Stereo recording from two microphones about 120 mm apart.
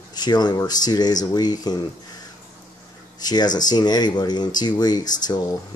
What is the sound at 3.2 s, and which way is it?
Speech, 35° left (ahead or behind).